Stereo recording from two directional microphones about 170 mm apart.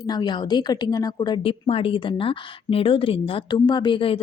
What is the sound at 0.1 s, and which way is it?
A woman's voice, 25° left (ahead or behind).